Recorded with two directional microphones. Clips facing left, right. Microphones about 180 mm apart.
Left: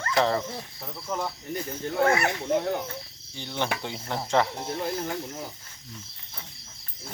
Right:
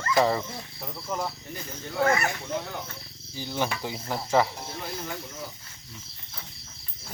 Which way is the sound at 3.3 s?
5° right (ahead or behind).